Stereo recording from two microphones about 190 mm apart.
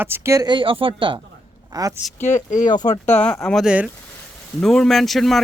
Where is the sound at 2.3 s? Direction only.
40° left (ahead or behind).